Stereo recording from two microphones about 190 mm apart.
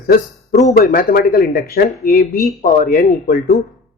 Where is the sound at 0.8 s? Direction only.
50° left (ahead or behind).